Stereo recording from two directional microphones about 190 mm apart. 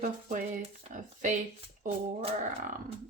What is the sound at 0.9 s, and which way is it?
Speech, 40° right (ahead or behind).